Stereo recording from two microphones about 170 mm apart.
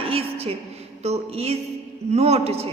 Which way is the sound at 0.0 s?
35° right (ahead or behind).